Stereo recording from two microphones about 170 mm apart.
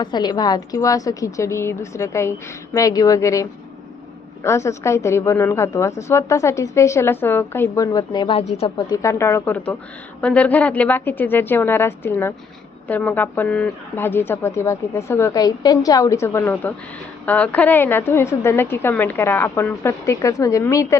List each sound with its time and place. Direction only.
0.0 s a woman's voice: 25° left (ahead or behind)
4.4 s a woman's voice: 15° left (ahead or behind); by 8.7 s 35° left (ahead or behind)
8.8 s a woman's voice: 20° left (ahead or behind)